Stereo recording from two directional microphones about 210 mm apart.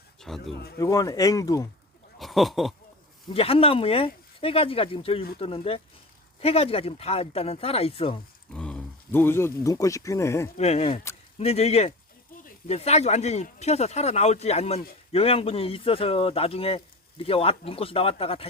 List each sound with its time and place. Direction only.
0.2 s speech: 5° left (ahead or behind)
0.5 s speech: 50° left (ahead or behind)
0.8 s speech: 15° left (ahead or behind)
2.1 s a sound: centre (ahead or behind)
3.3 s speech: 25° left (ahead or behind)
8.5 s speech: 5° left (ahead or behind)
10.6 s speech: 30° left (ahead or behind)